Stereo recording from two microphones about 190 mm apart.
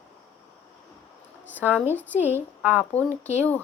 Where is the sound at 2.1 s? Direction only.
10° right (ahead or behind).